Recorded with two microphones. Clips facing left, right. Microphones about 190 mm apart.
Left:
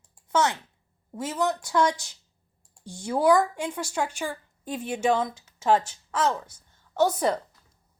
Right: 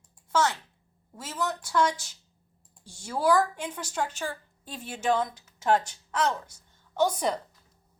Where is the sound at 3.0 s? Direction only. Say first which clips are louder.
Left 3 dB; 15° left (ahead or behind).